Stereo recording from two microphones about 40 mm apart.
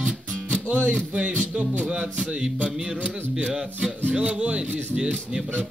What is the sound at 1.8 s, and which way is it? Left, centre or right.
Music, right.